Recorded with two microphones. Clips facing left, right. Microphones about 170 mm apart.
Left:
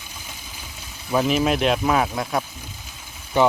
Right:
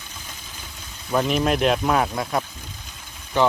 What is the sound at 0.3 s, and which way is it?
Vehicle, 10° left (ahead or behind).